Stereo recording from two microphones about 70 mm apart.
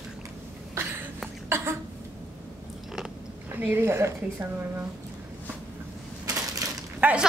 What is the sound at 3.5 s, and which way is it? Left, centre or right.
Speech, right.